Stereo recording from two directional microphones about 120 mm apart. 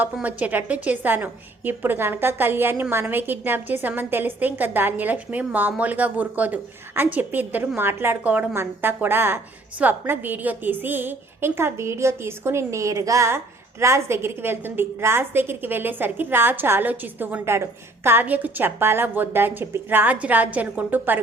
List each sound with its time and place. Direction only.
0.0 s a woman's voice: 10° right (ahead or behind)